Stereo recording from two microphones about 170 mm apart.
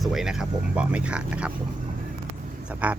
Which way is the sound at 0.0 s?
Centre (ahead or behind).